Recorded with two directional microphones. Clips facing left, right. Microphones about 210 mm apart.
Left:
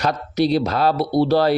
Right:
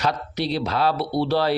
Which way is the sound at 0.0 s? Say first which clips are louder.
Left 5 dB; 45° left (ahead or behind).